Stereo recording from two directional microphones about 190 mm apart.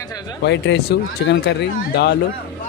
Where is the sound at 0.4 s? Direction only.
65° left (ahead or behind).